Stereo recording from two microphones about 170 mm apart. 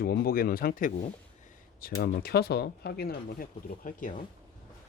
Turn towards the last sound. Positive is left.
turn(degrees=50)  # may be behind; listen again after turning